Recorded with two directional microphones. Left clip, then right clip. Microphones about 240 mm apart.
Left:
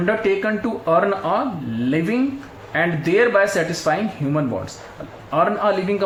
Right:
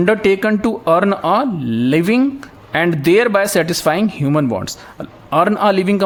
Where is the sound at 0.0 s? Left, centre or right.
Right.